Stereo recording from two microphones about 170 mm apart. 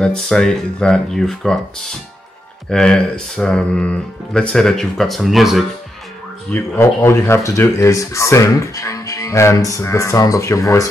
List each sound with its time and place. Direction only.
0.0 s speech: 5° left (ahead or behind)
2.7 s speech: 5° left (ahead or behind)
6.5 s speech: 15° left (ahead or behind)